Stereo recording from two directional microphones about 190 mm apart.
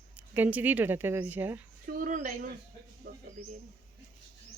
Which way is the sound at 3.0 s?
50° right (ahead or behind).